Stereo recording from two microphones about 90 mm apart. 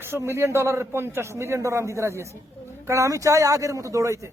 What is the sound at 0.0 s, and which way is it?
A man's voice, 30° right (ahead or behind).